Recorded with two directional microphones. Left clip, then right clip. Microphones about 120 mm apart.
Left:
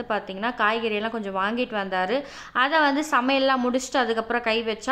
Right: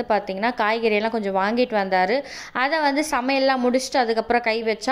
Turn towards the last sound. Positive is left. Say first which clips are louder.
# right 3 dB
turn(degrees=-30)  # may be behind; listen again after turning